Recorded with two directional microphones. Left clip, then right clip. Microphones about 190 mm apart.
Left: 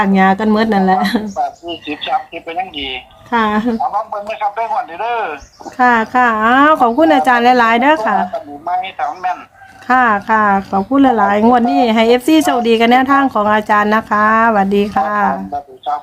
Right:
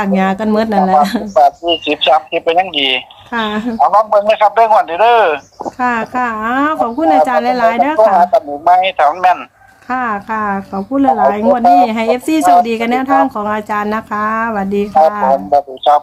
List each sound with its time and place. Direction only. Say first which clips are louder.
0.0 s speech: left 2 dB; 5° left (ahead or behind)
1.4 s speech: right 10 dB; 55° right (ahead or behind)
3.3 s speech: left 3 dB; 10° left (ahead or behind)
3.8 s speech: right 9 dB; 55° right (ahead or behind)
5.8 s speech: left 5 dB; 10° left (ahead or behind)
8.2 s speech: right 9 dB; 55° right (ahead or behind)
9.9 s speech: left 6 dB; 15° left (ahead or behind)
15.5 s music: right 10 dB; 55° right (ahead or behind)